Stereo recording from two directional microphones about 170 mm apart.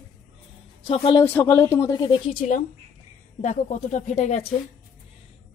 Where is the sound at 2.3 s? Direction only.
45° left (ahead or behind).